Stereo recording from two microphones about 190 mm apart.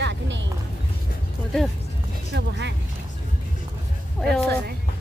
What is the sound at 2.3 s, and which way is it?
Speech, 65° right (ahead or behind).